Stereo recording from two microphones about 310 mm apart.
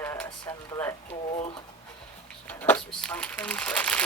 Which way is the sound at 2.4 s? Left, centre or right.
Centre.